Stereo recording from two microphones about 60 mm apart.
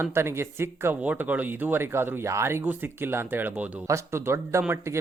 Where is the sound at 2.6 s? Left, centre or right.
Right.